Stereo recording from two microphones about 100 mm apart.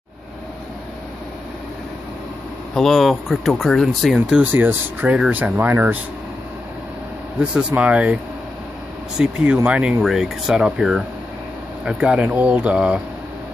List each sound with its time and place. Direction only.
2.7 s speech: 5° left (ahead or behind)
4.4 s speech: 20° right (ahead or behind)
7.3 s speech: 10° right (ahead or behind)
9.2 s speech: 10° right (ahead or behind)